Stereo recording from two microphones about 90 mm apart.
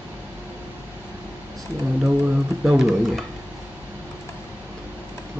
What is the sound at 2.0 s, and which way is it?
Speech, 10° right (ahead or behind).